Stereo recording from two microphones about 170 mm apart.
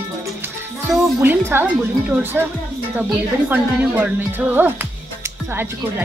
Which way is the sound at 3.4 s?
10° right (ahead or behind).